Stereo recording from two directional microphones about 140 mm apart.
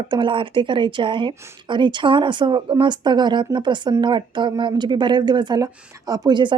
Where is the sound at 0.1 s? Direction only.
35° right (ahead or behind).